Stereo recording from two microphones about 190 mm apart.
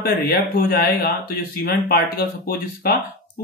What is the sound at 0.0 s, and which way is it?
Speech, 50° left (ahead or behind).